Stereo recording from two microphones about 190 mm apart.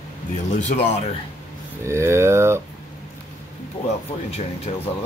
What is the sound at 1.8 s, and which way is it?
Speech, 15° right (ahead or behind).